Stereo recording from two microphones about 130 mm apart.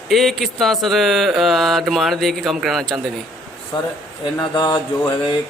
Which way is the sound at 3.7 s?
35° left (ahead or behind).